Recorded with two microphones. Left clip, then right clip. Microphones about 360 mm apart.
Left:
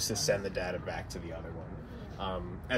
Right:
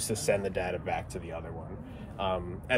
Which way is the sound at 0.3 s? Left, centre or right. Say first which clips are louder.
Right 5 dB; right.